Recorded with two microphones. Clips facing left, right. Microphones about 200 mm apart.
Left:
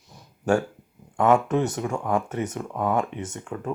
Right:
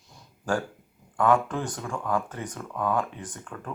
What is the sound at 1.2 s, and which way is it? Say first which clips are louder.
Speech: left 4 dB; 25° left (ahead or behind).